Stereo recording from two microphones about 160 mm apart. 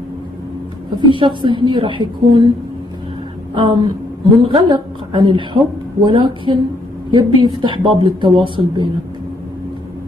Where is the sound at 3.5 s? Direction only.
35° right (ahead or behind).